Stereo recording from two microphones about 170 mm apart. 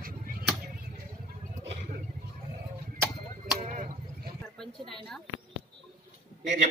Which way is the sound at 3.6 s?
50° right (ahead or behind).